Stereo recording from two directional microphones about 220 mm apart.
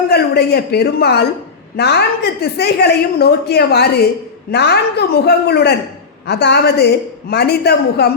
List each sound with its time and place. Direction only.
0.1 s a woman's voice: 45° left (ahead or behind)